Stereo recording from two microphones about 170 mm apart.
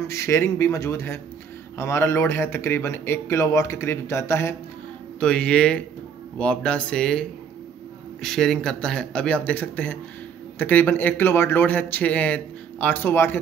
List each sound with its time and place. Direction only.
0.0 s a man's voice: 15° left (ahead or behind)